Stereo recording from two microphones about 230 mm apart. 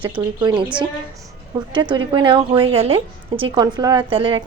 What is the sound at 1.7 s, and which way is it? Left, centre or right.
Speech, centre.